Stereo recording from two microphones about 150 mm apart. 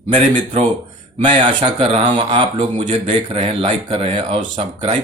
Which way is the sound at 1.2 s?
35° right (ahead or behind).